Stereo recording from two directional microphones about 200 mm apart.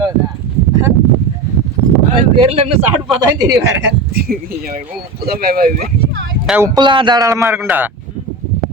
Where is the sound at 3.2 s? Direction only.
20° right (ahead or behind).